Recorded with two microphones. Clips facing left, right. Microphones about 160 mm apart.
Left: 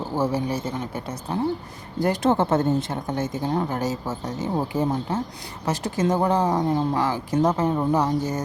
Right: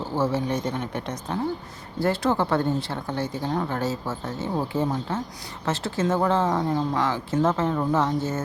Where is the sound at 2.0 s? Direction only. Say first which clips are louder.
Left 2 dB; 20° left (ahead or behind).